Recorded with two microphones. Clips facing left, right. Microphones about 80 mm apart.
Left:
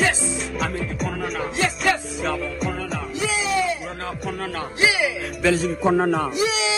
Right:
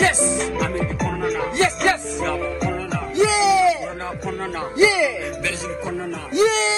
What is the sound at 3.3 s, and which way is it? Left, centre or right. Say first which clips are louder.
Music: right 6 dB; right.